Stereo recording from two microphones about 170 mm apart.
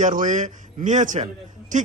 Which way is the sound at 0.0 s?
50° right (ahead or behind).